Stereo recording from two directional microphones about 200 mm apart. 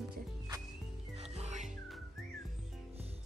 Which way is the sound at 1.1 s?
35° right (ahead or behind).